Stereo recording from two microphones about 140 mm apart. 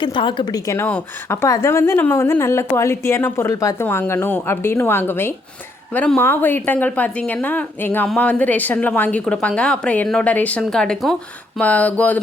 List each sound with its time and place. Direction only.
0.0 s a woman's voice: 35° left (ahead or behind)
0.7 s a woman's voice: 15° left (ahead or behind)